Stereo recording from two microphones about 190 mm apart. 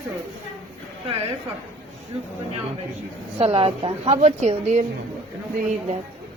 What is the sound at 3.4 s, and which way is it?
A woman's voice, 30° right (ahead or behind).